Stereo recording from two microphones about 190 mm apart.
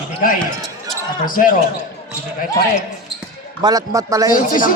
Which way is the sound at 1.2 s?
45° left (ahead or behind).